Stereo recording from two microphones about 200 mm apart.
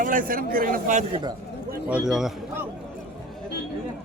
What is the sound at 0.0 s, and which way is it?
A man's voice, 40° right (ahead or behind).